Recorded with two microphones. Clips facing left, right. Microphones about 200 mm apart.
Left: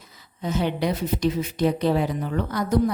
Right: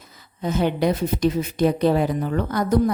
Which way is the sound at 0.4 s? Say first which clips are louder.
Right 4 dB; 50° right (ahead or behind).